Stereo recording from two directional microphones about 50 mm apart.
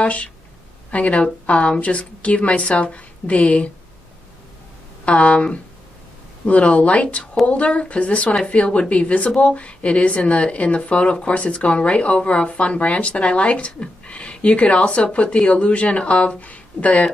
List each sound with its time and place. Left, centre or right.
0.0 s speech: left
5.0 s speech: left